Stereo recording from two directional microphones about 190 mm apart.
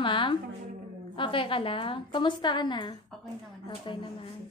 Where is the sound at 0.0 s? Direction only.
25° left (ahead or behind).